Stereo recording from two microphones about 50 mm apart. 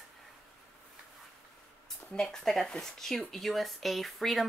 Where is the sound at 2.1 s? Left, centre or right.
Centre.